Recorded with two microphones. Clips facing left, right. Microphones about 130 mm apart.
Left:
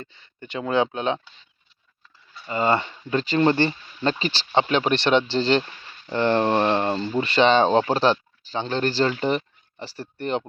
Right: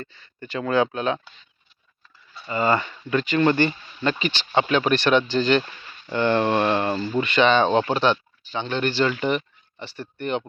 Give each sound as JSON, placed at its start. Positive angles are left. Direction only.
{"t": 0.0, "sound": "speech", "side_deg": 20}
{"t": 2.5, "sound": "speech", "side_deg": 25}